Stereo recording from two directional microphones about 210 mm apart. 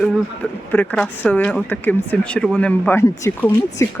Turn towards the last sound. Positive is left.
turn(degrees=15)  # may be behind; listen again after turning